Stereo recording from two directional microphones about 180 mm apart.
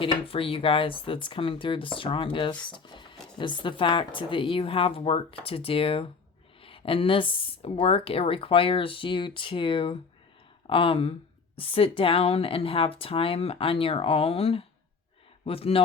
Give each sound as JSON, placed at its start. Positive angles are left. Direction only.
{"t": 0.0, "sound": "a woman's voice", "side_deg": 30}